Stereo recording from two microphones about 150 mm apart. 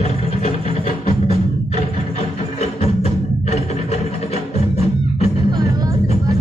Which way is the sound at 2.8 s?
45° left (ahead or behind).